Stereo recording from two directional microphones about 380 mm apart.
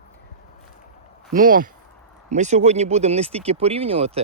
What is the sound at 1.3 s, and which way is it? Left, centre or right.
Speech, right.